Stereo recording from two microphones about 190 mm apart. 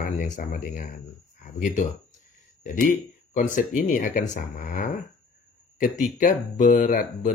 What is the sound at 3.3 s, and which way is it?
Speech, 40° left (ahead or behind).